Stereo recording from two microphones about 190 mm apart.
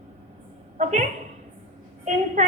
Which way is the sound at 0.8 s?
40° right (ahead or behind).